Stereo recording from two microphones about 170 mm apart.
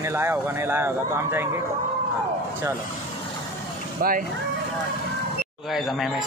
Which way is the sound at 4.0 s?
55° right (ahead or behind).